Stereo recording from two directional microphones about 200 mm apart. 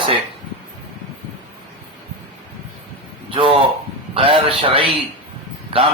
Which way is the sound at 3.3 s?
25° right (ahead or behind).